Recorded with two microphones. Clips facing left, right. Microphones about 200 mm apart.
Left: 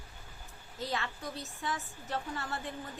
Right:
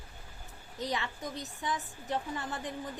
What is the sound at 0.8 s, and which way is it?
A woman's voice, 20° right (ahead or behind).